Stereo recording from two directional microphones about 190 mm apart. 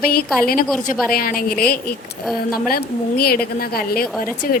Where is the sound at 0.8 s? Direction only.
45° left (ahead or behind).